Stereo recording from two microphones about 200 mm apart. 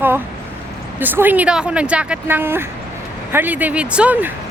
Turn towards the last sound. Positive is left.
turn(degrees=-5)  # may be behind; listen again after turning